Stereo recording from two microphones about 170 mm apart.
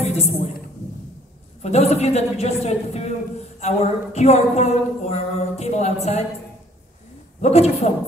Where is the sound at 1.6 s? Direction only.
40° left (ahead or behind).